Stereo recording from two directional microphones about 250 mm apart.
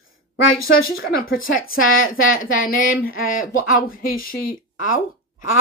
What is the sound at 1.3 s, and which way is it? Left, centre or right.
Speech, left.